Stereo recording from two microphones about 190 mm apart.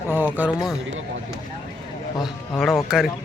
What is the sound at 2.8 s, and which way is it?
Speech, centre (ahead or behind).